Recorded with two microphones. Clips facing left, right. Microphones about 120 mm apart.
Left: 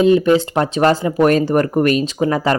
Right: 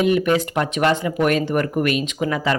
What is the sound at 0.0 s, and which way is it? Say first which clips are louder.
Speech: left 5 dB; 30° left (ahead or behind).